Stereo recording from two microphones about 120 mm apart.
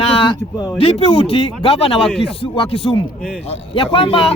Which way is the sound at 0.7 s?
55° left (ahead or behind).